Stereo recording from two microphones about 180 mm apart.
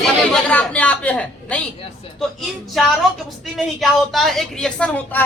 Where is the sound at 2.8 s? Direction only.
Centre (ahead or behind).